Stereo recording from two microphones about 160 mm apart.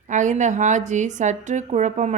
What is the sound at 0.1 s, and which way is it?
A woman's voice, 50° right (ahead or behind).